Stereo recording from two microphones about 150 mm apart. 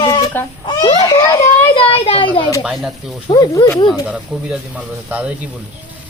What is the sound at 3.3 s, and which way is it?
Speech, 25° left (ahead or behind).